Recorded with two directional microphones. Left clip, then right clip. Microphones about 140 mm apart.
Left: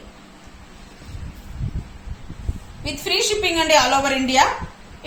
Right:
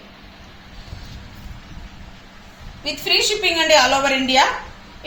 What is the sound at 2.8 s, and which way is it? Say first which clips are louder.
A woman's voice: right 3 dB; centre (ahead or behind).